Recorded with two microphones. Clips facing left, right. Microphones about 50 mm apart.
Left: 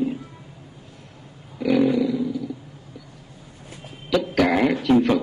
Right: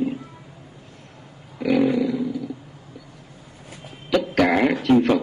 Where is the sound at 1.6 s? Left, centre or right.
Centre.